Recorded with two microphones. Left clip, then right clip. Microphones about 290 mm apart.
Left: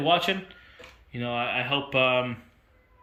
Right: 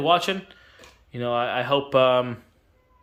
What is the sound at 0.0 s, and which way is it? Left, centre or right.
Speech, centre.